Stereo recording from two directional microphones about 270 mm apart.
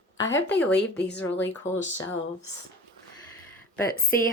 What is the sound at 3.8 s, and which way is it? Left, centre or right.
Speech, left.